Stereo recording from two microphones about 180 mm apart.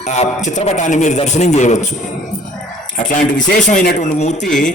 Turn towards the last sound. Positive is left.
turn(degrees=40)  # may be behind; listen again after turning